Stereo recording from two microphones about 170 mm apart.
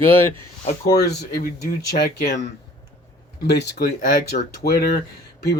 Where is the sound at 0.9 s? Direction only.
70° left (ahead or behind).